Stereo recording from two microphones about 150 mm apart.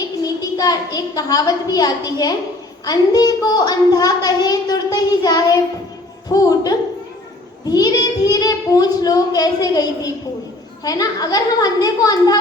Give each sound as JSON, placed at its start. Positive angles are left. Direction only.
{"t": 0.2, "sound": "a child's voice", "side_deg": 25}
{"t": 7.7, "sound": "a child's voice", "side_deg": 25}